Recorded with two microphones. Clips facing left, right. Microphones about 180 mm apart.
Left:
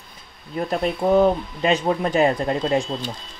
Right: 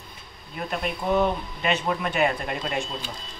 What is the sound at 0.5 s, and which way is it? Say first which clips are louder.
Speech: left 7 dB; 35° left (ahead or behind).